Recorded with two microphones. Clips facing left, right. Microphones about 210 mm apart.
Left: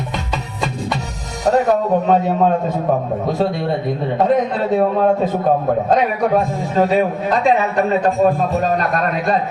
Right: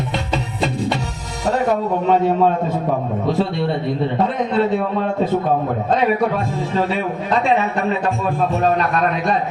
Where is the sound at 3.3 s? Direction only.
45° left (ahead or behind).